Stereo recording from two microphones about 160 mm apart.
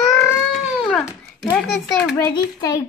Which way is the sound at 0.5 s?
5° left (ahead or behind).